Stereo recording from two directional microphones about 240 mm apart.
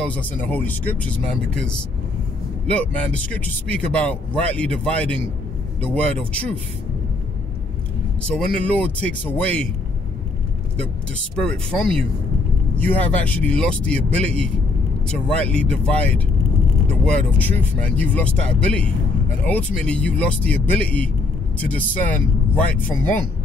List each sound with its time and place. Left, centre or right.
0.0 s speech: centre
8.3 s speech: centre
11.3 s speech: centre